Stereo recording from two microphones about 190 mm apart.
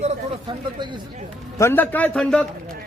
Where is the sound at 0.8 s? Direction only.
25° right (ahead or behind).